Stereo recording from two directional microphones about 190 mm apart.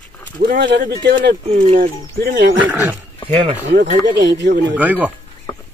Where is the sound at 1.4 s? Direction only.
35° right (ahead or behind).